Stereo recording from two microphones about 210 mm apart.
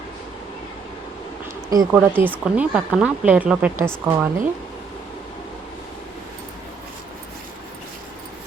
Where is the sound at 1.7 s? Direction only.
15° right (ahead or behind).